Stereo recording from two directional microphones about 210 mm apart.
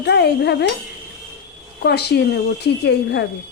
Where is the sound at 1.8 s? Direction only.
50° left (ahead or behind).